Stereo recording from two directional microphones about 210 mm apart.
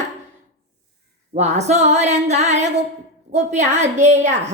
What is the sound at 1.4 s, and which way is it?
A woman's voice, 35° right (ahead or behind).